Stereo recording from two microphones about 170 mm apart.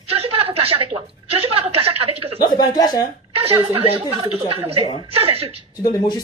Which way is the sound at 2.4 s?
20° left (ahead or behind).